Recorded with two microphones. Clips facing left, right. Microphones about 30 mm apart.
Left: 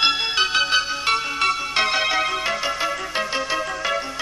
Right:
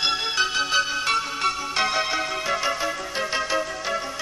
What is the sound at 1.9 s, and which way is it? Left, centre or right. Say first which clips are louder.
Music: left 3 dB; left.